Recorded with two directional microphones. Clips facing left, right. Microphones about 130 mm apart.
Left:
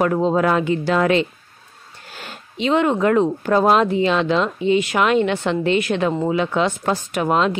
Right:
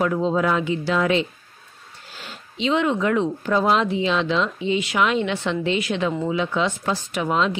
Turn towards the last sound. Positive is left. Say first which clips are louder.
# left 3 dB
turn(degrees=55)  # may be behind; listen again after turning